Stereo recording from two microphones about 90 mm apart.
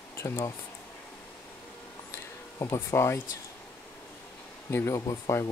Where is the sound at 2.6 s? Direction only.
30° left (ahead or behind).